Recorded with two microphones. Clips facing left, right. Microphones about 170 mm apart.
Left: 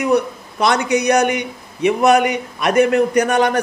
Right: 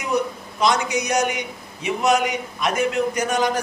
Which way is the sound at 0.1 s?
65° left (ahead or behind).